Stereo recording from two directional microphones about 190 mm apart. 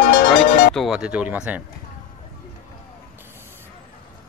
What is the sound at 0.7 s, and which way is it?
Speech, centre (ahead or behind).